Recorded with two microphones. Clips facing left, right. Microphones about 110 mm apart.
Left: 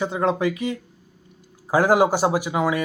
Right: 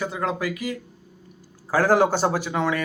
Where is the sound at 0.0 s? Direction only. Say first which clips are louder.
Left 5 dB; 25° left (ahead or behind).